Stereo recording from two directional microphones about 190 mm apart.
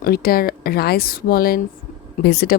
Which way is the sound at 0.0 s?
55° left (ahead or behind).